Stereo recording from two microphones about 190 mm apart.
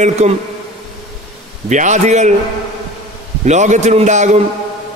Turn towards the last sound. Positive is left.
turn(degrees=-40)  # may be behind; listen again after turning